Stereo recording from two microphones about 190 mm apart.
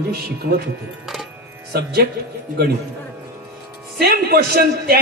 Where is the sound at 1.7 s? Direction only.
55° right (ahead or behind).